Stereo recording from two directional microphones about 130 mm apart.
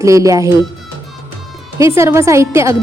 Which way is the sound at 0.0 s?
25° right (ahead or behind).